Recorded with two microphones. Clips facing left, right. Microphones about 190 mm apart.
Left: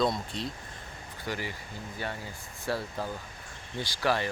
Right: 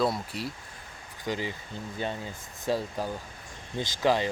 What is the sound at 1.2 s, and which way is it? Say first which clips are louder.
Speech: right 4 dB; 20° right (ahead or behind).